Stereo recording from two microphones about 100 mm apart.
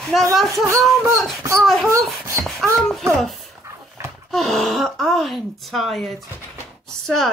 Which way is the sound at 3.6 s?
25° right (ahead or behind).